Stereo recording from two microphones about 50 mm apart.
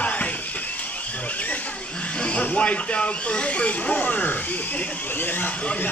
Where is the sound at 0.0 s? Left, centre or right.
Left.